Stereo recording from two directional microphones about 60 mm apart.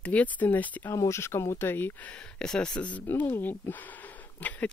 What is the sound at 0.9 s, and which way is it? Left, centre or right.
Speech, left.